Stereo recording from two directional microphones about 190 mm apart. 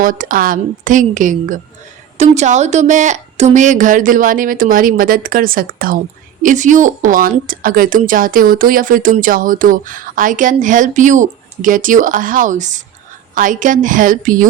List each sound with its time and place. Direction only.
0.0 s a woman's voice: 45° right (ahead or behind)